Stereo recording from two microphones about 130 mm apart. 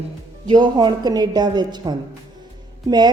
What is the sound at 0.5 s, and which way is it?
A woman's voice, 35° right (ahead or behind).